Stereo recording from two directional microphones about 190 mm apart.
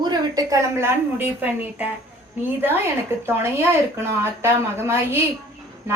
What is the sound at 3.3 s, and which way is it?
A woman's voice, 10° right (ahead or behind).